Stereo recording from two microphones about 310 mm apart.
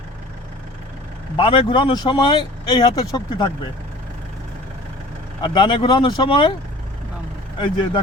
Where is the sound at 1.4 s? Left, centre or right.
Centre.